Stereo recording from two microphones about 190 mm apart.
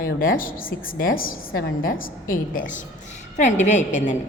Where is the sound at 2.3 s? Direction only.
45° left (ahead or behind).